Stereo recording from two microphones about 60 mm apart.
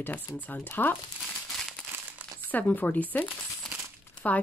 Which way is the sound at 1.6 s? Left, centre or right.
Centre.